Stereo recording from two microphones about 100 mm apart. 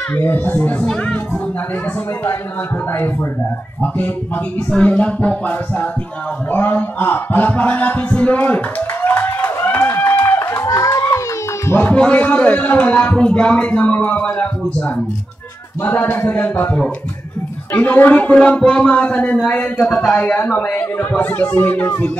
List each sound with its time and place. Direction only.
0.1 s a man's voice: 20° left (ahead or behind)
2.9 s speech: 25° left (ahead or behind)
4.6 s a man's voice: 10° left (ahead or behind)
6.5 s a sound: 20° left (ahead or behind)
11.8 s a man's voice: 15° left (ahead or behind)